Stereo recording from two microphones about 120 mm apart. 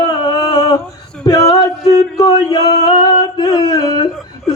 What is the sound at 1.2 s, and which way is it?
Female singing, 30° left (ahead or behind).